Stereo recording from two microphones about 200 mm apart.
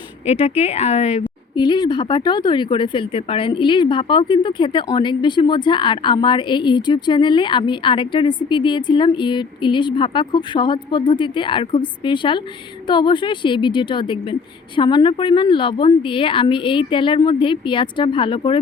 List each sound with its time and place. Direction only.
0.3 s speech: 30° left (ahead or behind)
1.5 s a woman's voice: 20° left (ahead or behind)